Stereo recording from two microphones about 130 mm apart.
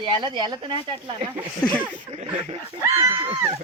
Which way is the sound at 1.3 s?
10° right (ahead or behind).